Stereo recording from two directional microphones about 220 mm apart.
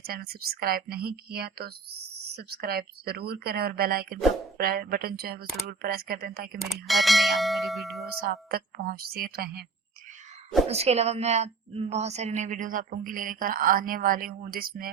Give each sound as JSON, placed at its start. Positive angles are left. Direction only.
{"t": 0.0, "sound": "speech", "side_deg": -45}
{"t": 6.6, "sound": "speech", "side_deg": 0}
{"t": 8.2, "sound": "speech", "side_deg": -45}
{"t": 10.7, "sound": "a woman's voice", "side_deg": -30}